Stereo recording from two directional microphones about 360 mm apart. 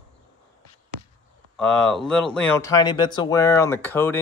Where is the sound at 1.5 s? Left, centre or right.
Centre.